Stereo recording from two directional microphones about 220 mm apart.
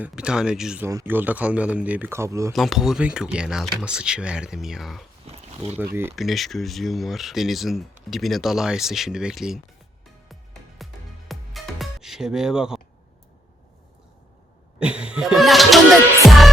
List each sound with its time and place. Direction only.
0.0 s speech: 5° right (ahead or behind)
2.5 s speech: centre (ahead or behind)
5.2 s a sound: 30° right (ahead or behind)
5.7 s speech: 10° right (ahead or behind)
10.2 s music: centre (ahead or behind)
14.8 s music: 5° right (ahead or behind)